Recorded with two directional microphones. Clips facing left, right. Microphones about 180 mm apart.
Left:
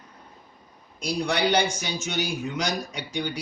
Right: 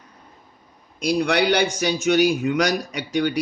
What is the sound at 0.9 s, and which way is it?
A man's voice, 65° right (ahead or behind).